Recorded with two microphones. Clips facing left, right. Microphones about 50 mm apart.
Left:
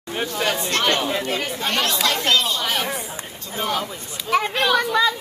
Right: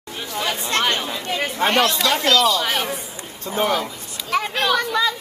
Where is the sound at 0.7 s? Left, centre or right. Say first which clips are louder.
Right 2 dB; right.